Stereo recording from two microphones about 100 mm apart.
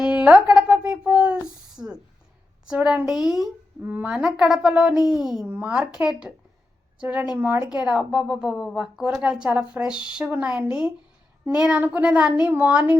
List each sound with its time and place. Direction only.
0.0 s a sound: 10° right (ahead or behind)
2.6 s a woman's voice: 10° right (ahead or behind)
3.8 s a woman's voice: 15° right (ahead or behind)
5.5 s speech: 15° right (ahead or behind)
5.8 s a woman's voice: 5° right (ahead or behind); by 7.7 s 20° right (ahead or behind)
7.7 s speech: 10° right (ahead or behind)